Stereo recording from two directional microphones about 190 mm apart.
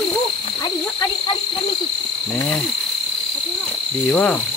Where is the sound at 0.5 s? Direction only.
15° left (ahead or behind).